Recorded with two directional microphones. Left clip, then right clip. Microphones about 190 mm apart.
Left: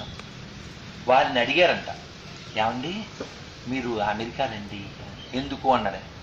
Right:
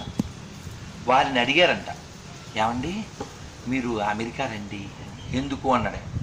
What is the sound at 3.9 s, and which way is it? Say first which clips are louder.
Speech: left 2 dB; 30° right (ahead or behind).